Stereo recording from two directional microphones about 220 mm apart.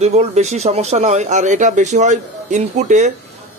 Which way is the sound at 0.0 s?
30° right (ahead or behind).